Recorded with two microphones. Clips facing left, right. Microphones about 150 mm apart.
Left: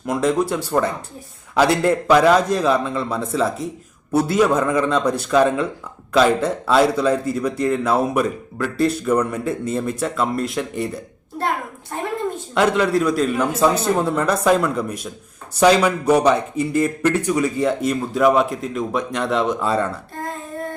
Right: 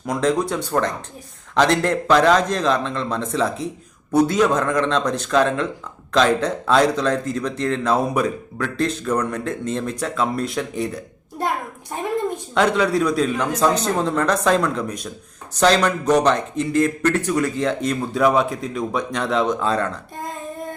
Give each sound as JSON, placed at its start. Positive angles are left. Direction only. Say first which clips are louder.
{"t": 0.0, "sound": "a man's voice", "louder": "left 1 dB", "side_deg": 5}
{"t": 11.9, "sound": "a sound", "louder": "left 1 dB", "side_deg": -15}
{"t": 12.5, "sound": "a man's voice", "louder": "left 1 dB", "side_deg": 5}